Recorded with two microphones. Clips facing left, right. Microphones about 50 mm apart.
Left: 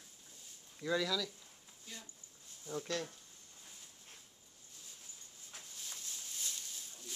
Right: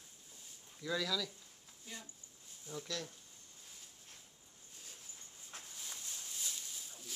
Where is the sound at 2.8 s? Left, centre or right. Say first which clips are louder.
Left 4 dB; left.